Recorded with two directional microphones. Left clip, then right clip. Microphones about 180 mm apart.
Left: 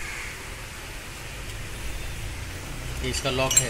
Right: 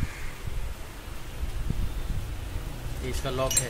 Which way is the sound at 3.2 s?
20° left (ahead or behind).